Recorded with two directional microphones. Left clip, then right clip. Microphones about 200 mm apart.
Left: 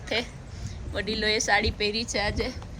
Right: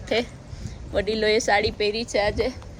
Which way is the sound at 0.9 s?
35° right (ahead or behind).